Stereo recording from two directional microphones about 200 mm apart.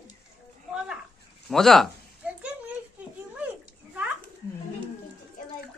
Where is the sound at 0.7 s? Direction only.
5° right (ahead or behind).